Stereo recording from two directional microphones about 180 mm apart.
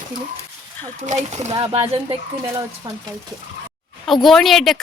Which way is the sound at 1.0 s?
40° right (ahead or behind).